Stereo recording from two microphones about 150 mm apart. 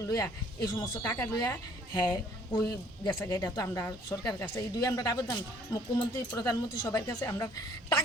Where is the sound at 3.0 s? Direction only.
30° left (ahead or behind).